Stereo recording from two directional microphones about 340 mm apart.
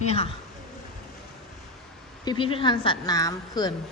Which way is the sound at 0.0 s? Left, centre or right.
Centre.